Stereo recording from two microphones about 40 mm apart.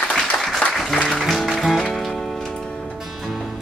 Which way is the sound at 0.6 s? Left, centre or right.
Left.